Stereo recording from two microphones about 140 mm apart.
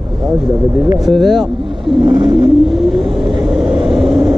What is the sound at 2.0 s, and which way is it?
Vehicle, 35° right (ahead or behind).